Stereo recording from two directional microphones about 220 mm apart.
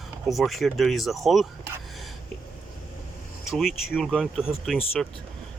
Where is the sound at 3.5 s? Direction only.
Centre (ahead or behind).